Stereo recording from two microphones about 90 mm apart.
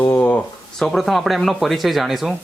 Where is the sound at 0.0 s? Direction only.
20° left (ahead or behind).